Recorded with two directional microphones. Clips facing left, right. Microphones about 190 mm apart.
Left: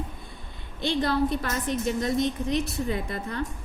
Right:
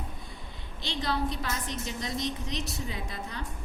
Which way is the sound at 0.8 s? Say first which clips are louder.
Left 7 dB; 55° left (ahead or behind).